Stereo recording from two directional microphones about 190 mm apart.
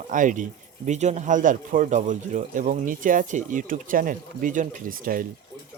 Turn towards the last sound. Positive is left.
turn(degrees=-45)  # may be behind; listen again after turning